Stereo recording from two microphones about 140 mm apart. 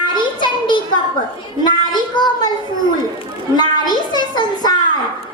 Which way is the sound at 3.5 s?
30° left (ahead or behind).